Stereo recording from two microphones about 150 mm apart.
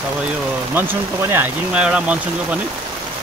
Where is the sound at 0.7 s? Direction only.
15° right (ahead or behind).